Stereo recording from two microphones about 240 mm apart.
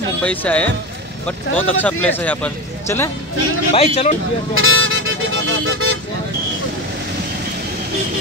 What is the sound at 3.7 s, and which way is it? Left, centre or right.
Speech, left.